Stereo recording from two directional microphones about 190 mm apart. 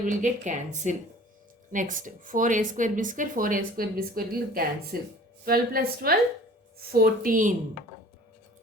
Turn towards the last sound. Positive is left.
turn(degrees=-45)  # may be behind; listen again after turning